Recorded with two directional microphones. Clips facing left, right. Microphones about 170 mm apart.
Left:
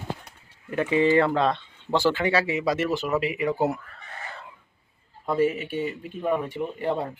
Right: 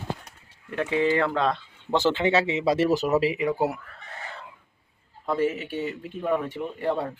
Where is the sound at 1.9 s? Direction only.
20° right (ahead or behind); by 3.3 s 35° right (ahead or behind).